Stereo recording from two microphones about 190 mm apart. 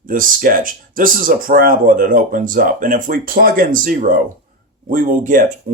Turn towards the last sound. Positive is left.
turn(degrees=-40)  # may be behind; listen again after turning